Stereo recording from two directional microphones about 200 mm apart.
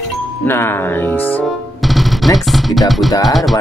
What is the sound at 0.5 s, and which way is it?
Speech, 10° left (ahead or behind).